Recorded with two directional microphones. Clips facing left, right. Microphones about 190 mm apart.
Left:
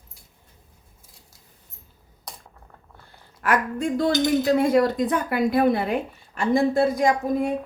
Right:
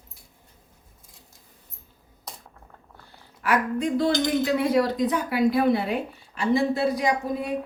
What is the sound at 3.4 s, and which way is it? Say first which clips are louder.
Speech: even; 50° left (ahead or behind).